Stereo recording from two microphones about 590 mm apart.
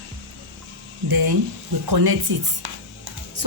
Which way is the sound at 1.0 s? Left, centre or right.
Right.